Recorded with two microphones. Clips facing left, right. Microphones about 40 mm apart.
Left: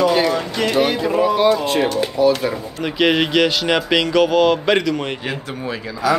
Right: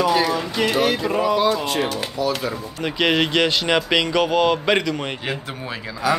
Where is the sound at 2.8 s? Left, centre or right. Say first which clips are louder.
Left 2 dB; centre.